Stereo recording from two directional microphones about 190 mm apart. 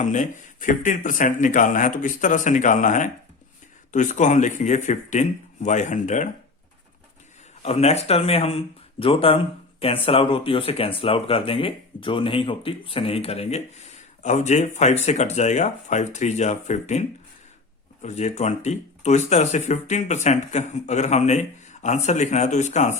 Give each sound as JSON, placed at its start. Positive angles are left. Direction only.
{"t": 0.0, "sound": "speech", "side_deg": 40}
{"t": 7.6, "sound": "speech", "side_deg": 35}